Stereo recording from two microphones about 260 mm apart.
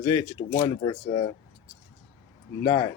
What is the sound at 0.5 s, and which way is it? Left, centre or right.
Speech, centre.